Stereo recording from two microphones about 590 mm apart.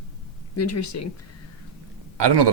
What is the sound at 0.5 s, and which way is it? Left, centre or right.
Speech, left.